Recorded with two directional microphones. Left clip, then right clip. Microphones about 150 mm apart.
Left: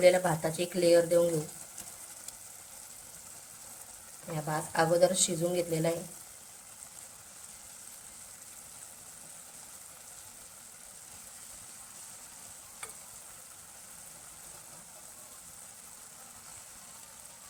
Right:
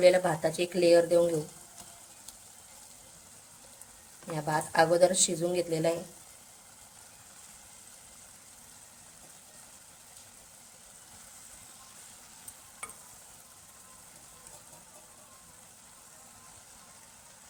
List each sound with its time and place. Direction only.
0.0 s speech: 15° right (ahead or behind)
4.4 s speech: 20° right (ahead or behind)